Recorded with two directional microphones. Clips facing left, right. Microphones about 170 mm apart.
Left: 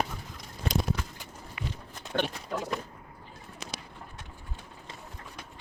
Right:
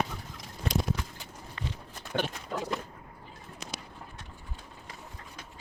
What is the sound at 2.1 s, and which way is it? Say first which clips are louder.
Speech: left 2 dB; 10° right (ahead or behind).